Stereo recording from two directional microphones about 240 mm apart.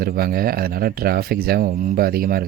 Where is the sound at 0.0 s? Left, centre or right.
Right.